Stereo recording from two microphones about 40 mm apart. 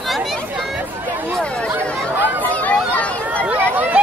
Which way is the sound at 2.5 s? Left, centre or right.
Left.